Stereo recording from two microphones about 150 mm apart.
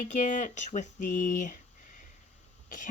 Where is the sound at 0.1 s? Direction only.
55° left (ahead or behind).